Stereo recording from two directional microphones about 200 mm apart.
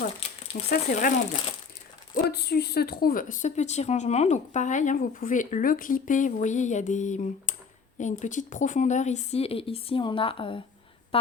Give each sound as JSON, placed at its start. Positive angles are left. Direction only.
{"t": 0.7, "sound": "speech", "side_deg": 40}
{"t": 2.3, "sound": "a woman's voice", "side_deg": 55}